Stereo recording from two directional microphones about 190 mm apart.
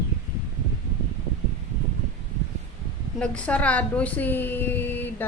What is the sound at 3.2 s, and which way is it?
A woman's voice, 5° left (ahead or behind).